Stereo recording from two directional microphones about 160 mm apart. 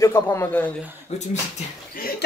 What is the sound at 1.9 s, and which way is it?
Speech, 70° left (ahead or behind).